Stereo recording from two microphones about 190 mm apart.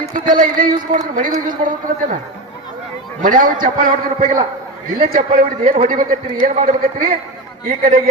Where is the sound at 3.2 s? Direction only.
45° right (ahead or behind).